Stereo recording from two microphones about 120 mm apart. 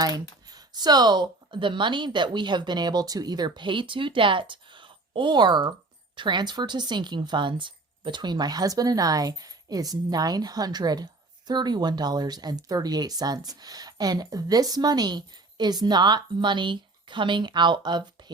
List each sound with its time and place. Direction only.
0.4 s speech: 35° right (ahead or behind)